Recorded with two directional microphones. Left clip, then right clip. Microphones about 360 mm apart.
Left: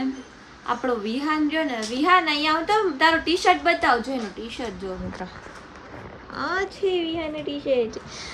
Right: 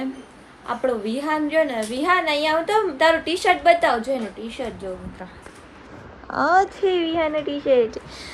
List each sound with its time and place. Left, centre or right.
0.7 s a woman's voice: centre
6.3 s a woman's voice: centre